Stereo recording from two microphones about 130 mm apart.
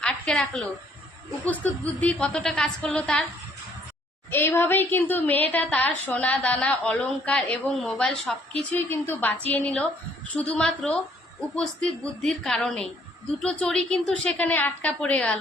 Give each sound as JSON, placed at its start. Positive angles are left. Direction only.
{"t": 0.0, "sound": "a sound", "side_deg": 5}
{"t": 1.5, "sound": "a woman's voice", "side_deg": 10}
{"t": 4.3, "sound": "a woman's voice", "side_deg": 15}
{"t": 8.7, "sound": "a woman's voice", "side_deg": 15}